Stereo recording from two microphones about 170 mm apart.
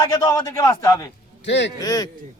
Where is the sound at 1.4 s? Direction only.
90° left.